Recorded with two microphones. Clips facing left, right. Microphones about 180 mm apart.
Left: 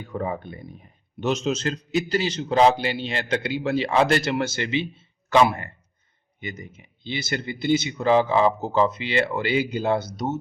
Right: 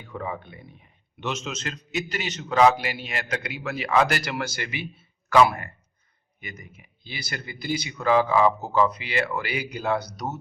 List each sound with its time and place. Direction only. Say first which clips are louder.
0.0 s speech: left 5 dB; 40° left (ahead or behind)